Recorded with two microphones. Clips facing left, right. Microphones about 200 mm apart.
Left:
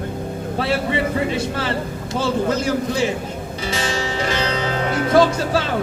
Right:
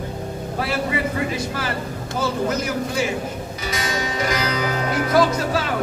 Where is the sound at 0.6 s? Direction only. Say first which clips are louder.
Left 3 dB; 30° left (ahead or behind).